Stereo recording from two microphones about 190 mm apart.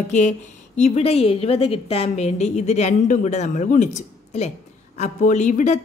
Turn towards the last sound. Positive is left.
turn(degrees=40)  # may be behind; listen again after turning